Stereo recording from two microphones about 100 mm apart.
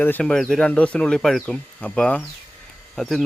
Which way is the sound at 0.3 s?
5° left (ahead or behind).